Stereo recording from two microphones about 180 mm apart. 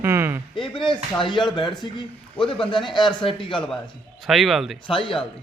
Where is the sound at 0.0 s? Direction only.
15° right (ahead or behind).